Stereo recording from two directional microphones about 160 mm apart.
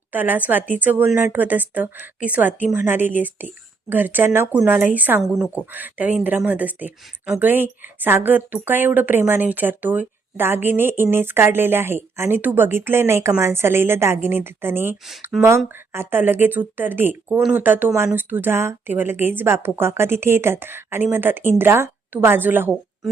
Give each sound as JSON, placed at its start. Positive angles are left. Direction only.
{"t": 0.1, "sound": "speech", "side_deg": -10}